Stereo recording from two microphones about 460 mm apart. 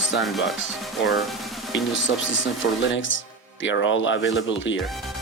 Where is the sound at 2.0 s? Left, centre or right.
Left.